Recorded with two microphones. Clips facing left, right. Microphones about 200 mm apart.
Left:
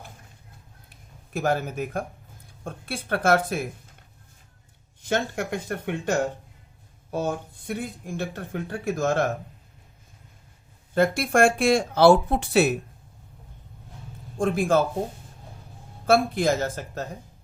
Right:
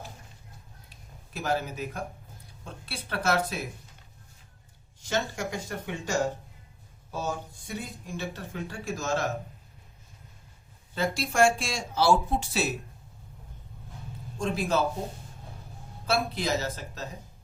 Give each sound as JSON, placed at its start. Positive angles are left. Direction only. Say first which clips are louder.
{"t": 0.9, "sound": "a sound", "louder": "even", "side_deg": 50}
{"t": 2.6, "sound": "speech", "louder": "left 9 dB", "side_deg": 50}
{"t": 5.0, "sound": "speech", "louder": "left 4 dB", "side_deg": 60}
{"t": 10.9, "sound": "speech", "louder": "left 6 dB", "side_deg": 55}
{"t": 14.3, "sound": "speech", "louder": "left 6 dB", "side_deg": 50}
{"t": 16.0, "sound": "speech", "louder": "left 8 dB", "side_deg": 50}